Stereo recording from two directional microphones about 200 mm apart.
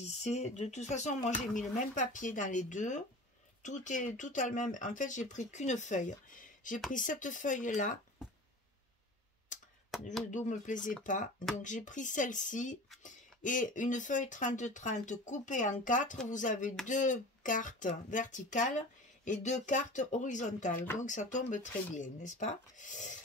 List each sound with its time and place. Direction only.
0.0 s speech: 35° left (ahead or behind)
9.5 s a sound: 40° left (ahead or behind)
10.3 s speech: 35° left (ahead or behind)